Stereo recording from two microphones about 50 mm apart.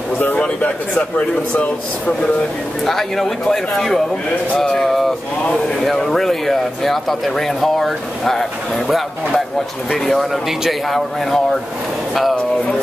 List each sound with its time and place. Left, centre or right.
1.5 s speech: left
2.8 s speech: centre